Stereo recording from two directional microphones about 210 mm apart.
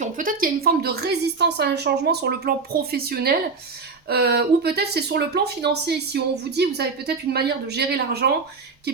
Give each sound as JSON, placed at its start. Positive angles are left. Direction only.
{"t": 0.0, "sound": "speech", "side_deg": -40}